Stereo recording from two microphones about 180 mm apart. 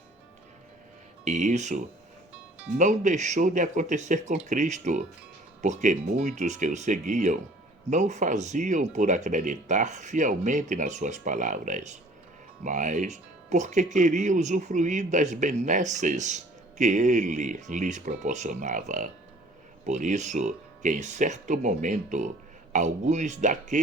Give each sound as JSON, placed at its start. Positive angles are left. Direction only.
{"t": 1.2, "sound": "speech", "side_deg": -45}